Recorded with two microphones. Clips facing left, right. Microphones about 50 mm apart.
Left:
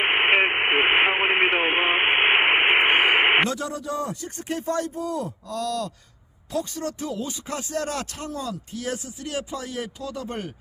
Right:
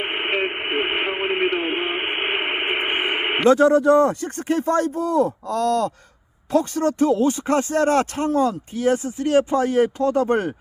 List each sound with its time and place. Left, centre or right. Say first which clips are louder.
0.0 s radio: left 4 dB; left
3.5 s speech: right 15 dB; right